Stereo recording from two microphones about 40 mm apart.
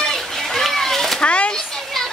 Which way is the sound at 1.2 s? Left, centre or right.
Left.